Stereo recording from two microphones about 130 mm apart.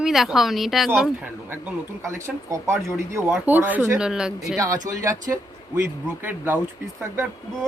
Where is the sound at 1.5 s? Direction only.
15° right (ahead or behind).